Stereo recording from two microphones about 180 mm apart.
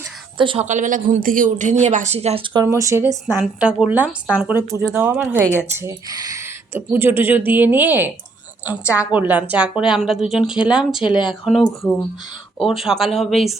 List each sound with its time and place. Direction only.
0.3 s a woman's voice: 25° right (ahead or behind)
0.6 s a woman's voice: 40° right (ahead or behind); by 13.6 s centre (ahead or behind)